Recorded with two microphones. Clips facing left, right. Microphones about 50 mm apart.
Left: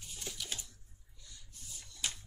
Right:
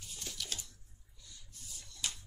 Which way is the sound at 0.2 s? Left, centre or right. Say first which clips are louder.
Even; centre.